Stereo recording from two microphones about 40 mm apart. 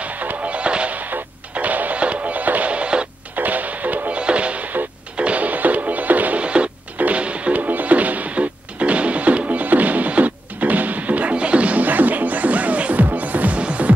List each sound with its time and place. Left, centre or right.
0.0 s music: right
1.5 s music: right
2.7 s a sound: right
3.3 s music: right
4.2 s music: right
6.4 s music: right
7.6 s music: right
13.6 s music: right